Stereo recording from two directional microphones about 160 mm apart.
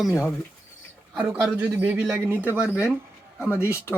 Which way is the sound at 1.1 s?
5° right (ahead or behind).